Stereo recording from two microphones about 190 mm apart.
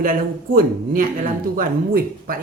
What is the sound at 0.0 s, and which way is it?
Speech, 45° right (ahead or behind).